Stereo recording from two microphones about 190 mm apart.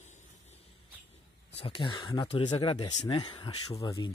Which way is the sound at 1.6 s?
25° left (ahead or behind).